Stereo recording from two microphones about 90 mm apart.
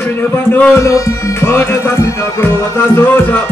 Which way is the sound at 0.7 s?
35° left (ahead or behind).